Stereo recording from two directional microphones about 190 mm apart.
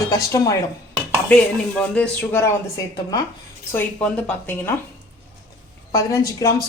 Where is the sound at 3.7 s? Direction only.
10° left (ahead or behind).